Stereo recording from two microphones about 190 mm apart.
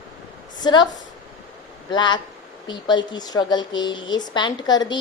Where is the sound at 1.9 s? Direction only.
25° left (ahead or behind).